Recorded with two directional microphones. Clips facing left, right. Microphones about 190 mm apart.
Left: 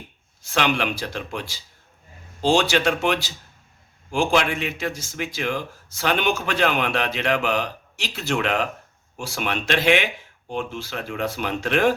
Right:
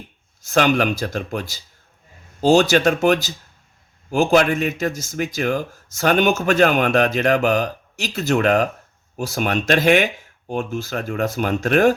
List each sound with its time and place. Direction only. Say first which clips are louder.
0.4 s speech: right 6 dB; 45° right (ahead or behind)